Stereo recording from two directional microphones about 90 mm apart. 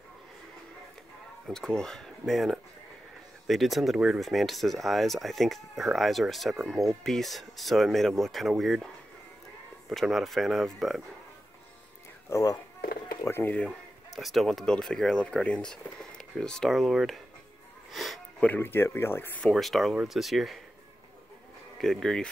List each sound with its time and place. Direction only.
1.5 s speech: 5° left (ahead or behind)
9.8 s speech: 5° right (ahead or behind)
12.3 s speech: 40° left (ahead or behind)
13.7 s speech: centre (ahead or behind)
17.9 s sniff: centre (ahead or behind)
18.4 s speech: 20° left (ahead or behind)
19.5 s speech: centre (ahead or behind)
21.7 s speech: 5° left (ahead or behind)